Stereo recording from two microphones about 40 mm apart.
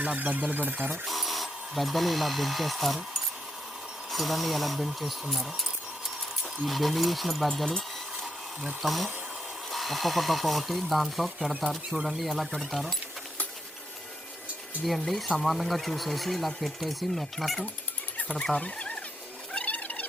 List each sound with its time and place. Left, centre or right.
0.0 s speech: right
1.0 s speech: centre
4.1 s speech: centre
6.7 s speech: centre
7.4 s speech: centre
8.8 s speech: centre
14.8 s speech: centre
18.6 s a sound: left
19.5 s cat: left